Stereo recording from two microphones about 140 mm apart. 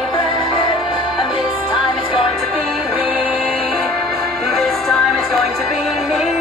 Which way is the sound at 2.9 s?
10° right (ahead or behind).